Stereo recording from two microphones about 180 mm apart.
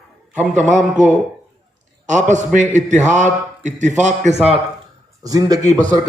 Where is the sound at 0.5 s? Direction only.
40° right (ahead or behind).